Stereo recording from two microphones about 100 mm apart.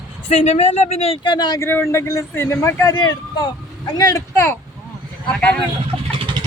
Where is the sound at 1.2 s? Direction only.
45° left (ahead or behind).